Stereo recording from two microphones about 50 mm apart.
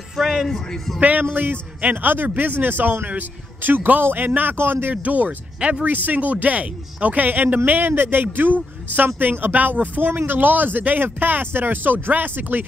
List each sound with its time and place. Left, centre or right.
0.2 s music: centre
0.5 s a man's voice: centre
1.3 s speech: right
5.0 s speech: right
5.6 s speech: right
5.9 s speech: right